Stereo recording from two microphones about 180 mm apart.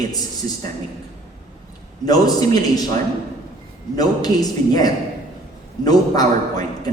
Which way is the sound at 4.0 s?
20° left (ahead or behind).